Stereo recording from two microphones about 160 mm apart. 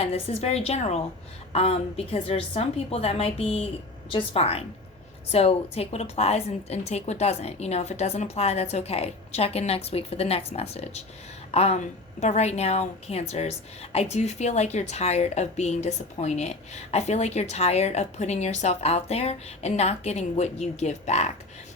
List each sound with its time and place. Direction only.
0.0 s a woman's voice: 40° left (ahead or behind)